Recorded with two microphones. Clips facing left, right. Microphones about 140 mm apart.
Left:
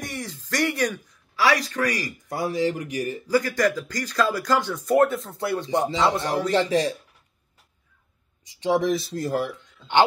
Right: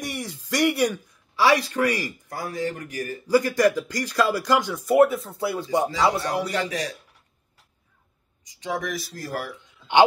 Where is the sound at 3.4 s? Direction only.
15° right (ahead or behind).